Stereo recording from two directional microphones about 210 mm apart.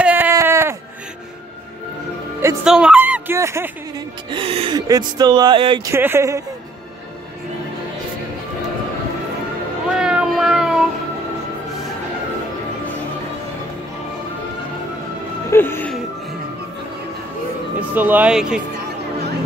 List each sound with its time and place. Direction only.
0.0 s a sound: 10° right (ahead or behind)
2.6 s speech: 5° right (ahead or behind)
4.3 s speech: 25° right (ahead or behind)
5.9 s speech: 10° right (ahead or behind)
9.8 s a sound: 5° right (ahead or behind)
15.5 s music: 10° left (ahead or behind)
17.7 s speech: 10° right (ahead or behind)